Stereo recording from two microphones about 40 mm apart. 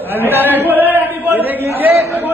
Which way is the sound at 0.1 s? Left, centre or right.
Right.